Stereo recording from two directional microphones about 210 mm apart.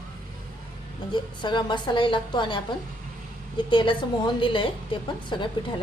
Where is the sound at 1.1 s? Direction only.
20° left (ahead or behind).